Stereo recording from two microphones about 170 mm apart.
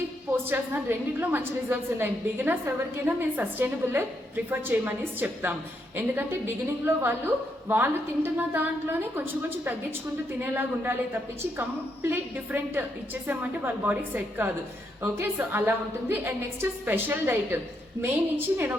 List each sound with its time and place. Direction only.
0.4 s a woman's voice: 10° right (ahead or behind)